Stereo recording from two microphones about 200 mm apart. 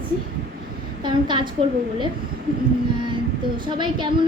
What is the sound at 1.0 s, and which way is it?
Speech, 25° right (ahead or behind).